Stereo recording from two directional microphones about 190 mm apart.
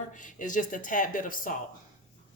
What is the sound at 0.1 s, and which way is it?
Speech, 40° left (ahead or behind).